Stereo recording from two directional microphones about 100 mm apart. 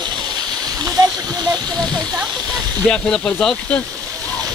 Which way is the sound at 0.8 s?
35° right (ahead or behind).